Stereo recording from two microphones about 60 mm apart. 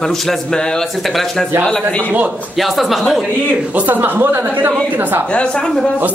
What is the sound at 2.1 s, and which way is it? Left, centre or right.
Speech, right.